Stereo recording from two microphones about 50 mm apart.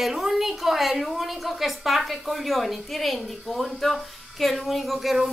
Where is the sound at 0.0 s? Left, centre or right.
Centre.